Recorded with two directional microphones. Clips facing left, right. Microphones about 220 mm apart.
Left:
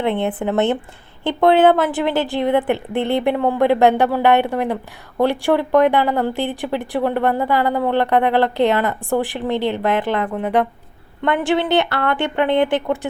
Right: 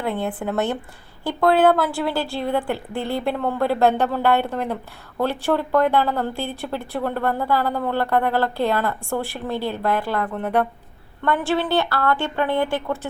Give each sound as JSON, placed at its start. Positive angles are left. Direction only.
{"t": 0.0, "sound": "a woman's voice", "side_deg": 25}